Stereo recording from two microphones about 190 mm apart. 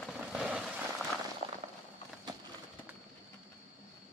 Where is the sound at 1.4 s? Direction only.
35° right (ahead or behind).